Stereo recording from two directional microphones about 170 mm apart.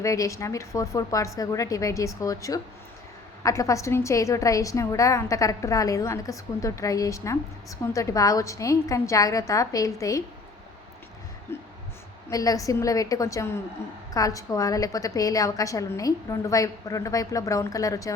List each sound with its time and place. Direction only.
0.0 s a woman's voice: 20° left (ahead or behind)
12.3 s a woman's voice: 20° left (ahead or behind)